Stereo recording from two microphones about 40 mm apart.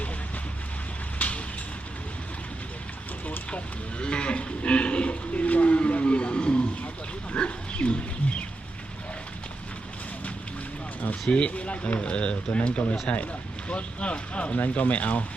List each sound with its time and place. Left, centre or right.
1.2 s vehicle: left
4.0 s livestock: left
5.5 s wild animals: left
7.3 s pig: left
11.0 s speech: left